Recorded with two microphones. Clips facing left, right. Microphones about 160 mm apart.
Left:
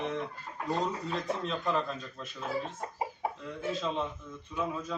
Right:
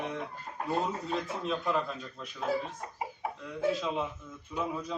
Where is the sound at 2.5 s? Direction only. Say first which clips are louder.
Right 3 dB; 90° right.